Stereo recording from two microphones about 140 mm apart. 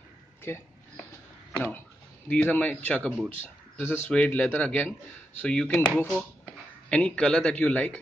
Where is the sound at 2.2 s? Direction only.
10° left (ahead or behind).